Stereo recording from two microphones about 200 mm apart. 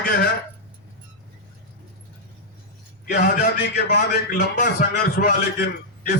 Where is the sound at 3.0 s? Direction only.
50° left (ahead or behind).